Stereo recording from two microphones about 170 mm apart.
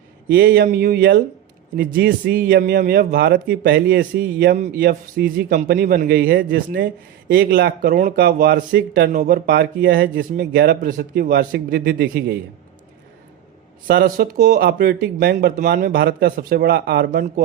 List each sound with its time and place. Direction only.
0.3 s speech: 65° right (ahead or behind)
4.5 s a man's voice: 45° right (ahead or behind)
4.8 s speech: 65° right (ahead or behind)
13.8 s speech: 65° right (ahead or behind)